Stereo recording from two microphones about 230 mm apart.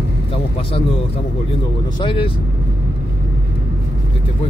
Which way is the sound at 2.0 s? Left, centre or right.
Left.